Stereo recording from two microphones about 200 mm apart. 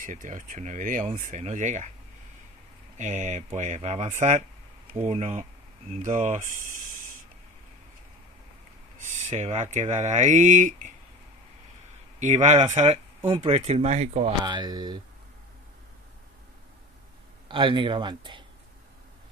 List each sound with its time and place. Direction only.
0.0 s speech: 40° right (ahead or behind)
3.0 s speech: 35° right (ahead or behind)
8.9 s speech: 35° right (ahead or behind)
12.2 s speech: 35° right (ahead or behind)
14.4 s speech: 20° right (ahead or behind)
17.5 s speech: 25° right (ahead or behind)